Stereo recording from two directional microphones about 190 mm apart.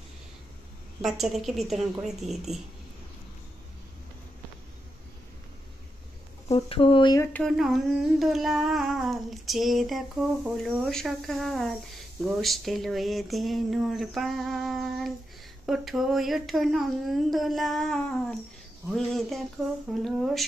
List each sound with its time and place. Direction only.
1.0 s babbling: centre (ahead or behind)
6.5 s speech: 30° left (ahead or behind)
7.3 s babbling: centre (ahead or behind)